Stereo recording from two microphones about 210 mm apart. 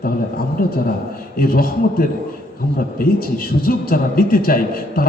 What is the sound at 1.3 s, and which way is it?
A man's voice, 45° left (ahead or behind).